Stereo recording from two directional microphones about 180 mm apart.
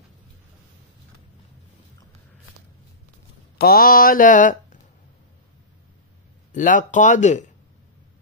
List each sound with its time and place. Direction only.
3.5 s speech: 60° left (ahead or behind)
6.5 s speech: 45° left (ahead or behind)